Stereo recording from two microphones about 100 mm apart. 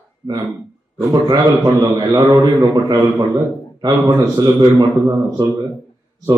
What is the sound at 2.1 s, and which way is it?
A man's voice, 35° right (ahead or behind).